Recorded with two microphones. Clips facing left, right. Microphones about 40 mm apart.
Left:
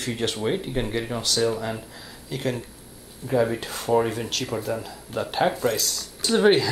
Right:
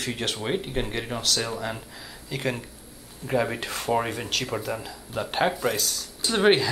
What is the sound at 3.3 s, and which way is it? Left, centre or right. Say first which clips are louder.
Speech: left 3 dB; right.